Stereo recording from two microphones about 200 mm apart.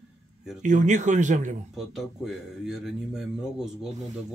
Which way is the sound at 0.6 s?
40° right (ahead or behind).